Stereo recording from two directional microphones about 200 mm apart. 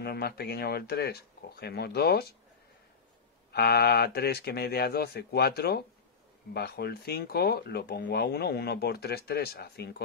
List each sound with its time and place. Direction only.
0.0 s speech: 50° left (ahead or behind)
3.5 s speech: 55° left (ahead or behind)